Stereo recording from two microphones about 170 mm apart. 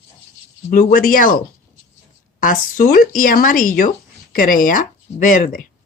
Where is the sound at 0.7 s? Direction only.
55° left (ahead or behind).